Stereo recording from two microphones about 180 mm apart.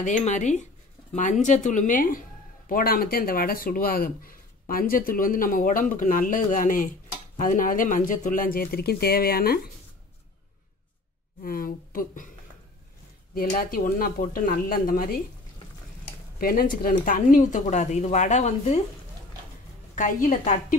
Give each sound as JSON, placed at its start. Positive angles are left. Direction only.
{"t": 0.0, "sound": "speech", "side_deg": 40}
{"t": 11.4, "sound": "speech", "side_deg": 50}
{"t": 13.6, "sound": "speech", "side_deg": 55}
{"t": 16.3, "sound": "speech", "side_deg": 55}
{"t": 20.0, "sound": "speech", "side_deg": 45}